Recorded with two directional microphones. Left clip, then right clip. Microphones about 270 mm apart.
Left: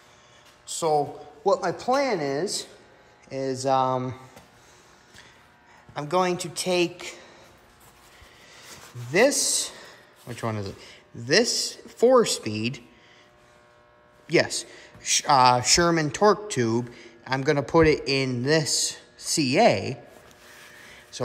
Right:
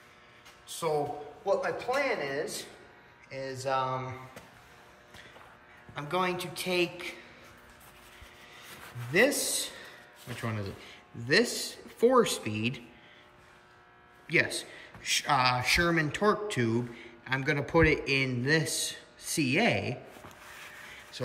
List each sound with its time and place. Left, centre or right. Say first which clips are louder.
0.7 s a sound: left 7 dB; centre
1.5 s a woman's voice: left 6 dB; centre
5.9 s a woman's voice: left 6 dB; centre
9.1 s a man's voice: left 5 dB; centre
14.2 s a man's voice: left 5 dB; centre
20.5 s a sound: left 1 dB; centre